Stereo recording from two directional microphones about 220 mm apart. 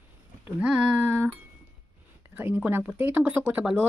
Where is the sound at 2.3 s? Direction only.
5° right (ahead or behind).